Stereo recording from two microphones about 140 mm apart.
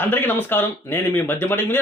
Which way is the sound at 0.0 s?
15° left (ahead or behind).